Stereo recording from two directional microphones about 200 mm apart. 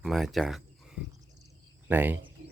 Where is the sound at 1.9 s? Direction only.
10° right (ahead or behind).